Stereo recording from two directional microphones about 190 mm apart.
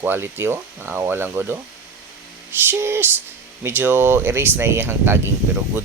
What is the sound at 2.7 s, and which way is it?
Speech, 15° right (ahead or behind).